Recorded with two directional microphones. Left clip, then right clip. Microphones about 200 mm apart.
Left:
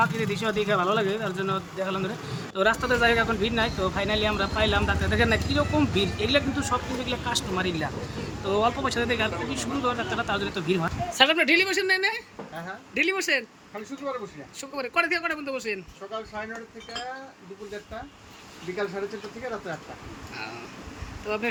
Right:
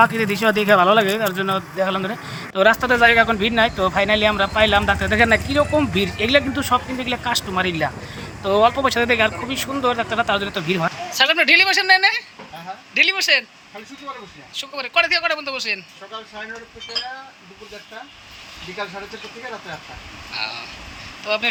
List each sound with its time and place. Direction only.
0.0 s speech: 30° right (ahead or behind)
11.2 s speech: 10° left (ahead or behind)
14.6 s speech: 20° left (ahead or behind)